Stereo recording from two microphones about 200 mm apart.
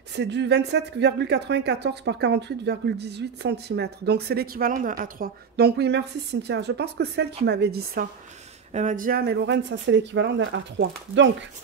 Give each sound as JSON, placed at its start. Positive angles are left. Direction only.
{"t": 0.1, "sound": "speech", "side_deg": -60}